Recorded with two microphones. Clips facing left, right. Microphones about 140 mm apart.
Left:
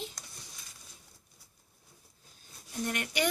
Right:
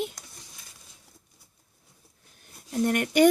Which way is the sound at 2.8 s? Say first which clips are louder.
Right 12 dB; 50° right (ahead or behind).